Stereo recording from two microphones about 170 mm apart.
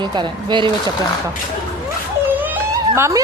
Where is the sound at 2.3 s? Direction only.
10° right (ahead or behind).